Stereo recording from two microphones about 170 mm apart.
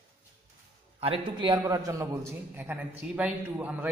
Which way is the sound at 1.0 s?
30° right (ahead or behind).